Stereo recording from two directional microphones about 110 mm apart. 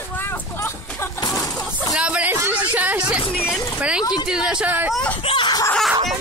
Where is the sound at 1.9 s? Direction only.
10° right (ahead or behind).